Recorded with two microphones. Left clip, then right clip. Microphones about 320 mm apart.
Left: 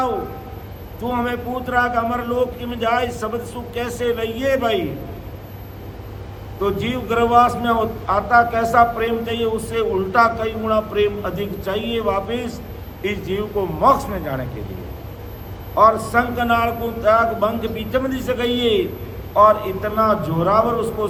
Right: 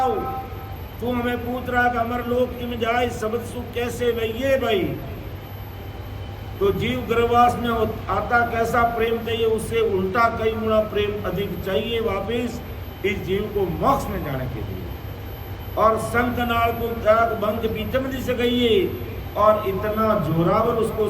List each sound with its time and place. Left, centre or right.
1.1 s a man's voice: centre
6.6 s a man's voice: centre
15.7 s a man's voice: centre